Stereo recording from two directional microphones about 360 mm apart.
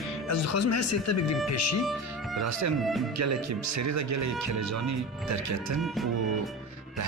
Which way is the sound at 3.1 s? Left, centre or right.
Right.